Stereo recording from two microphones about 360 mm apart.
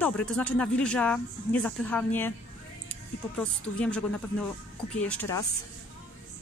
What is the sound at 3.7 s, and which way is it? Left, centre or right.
Speech, centre.